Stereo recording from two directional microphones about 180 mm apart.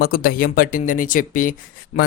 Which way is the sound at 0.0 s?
55° left (ahead or behind).